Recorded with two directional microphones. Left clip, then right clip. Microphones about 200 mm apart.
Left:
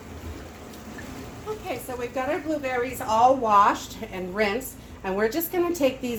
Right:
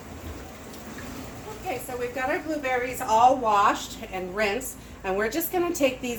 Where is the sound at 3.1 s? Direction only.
35° left (ahead or behind).